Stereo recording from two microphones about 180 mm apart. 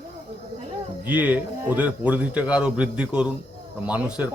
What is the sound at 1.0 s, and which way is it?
Speech, 10° right (ahead or behind).